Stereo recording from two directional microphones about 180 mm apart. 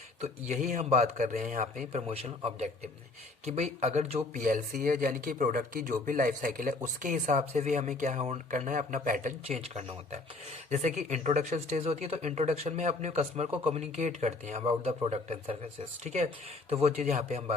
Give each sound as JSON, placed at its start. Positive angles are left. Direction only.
{"t": 0.2, "sound": "speech", "side_deg": -45}
{"t": 4.4, "sound": "speech", "side_deg": -50}
{"t": 10.7, "sound": "speech", "side_deg": -40}